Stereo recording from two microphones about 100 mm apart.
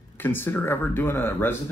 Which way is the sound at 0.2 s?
20° left (ahead or behind).